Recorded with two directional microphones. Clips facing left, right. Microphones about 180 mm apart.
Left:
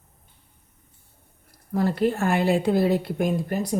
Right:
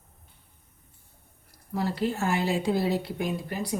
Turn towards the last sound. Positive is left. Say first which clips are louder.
# left 6 dB
turn(degrees=45)  # may be behind; listen again after turning